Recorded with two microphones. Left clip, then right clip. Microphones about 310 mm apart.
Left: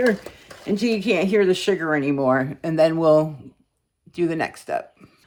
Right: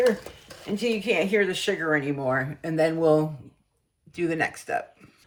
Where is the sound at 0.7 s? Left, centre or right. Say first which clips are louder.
Left 4 dB; centre.